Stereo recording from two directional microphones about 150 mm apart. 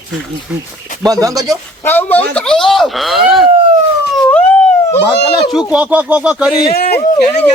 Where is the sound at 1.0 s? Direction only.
25° right (ahead or behind).